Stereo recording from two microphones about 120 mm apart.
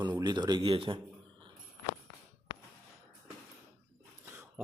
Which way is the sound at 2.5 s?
45° left (ahead or behind).